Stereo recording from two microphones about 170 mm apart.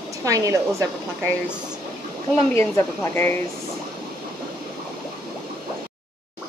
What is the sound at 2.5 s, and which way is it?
Speech, 15° left (ahead or behind).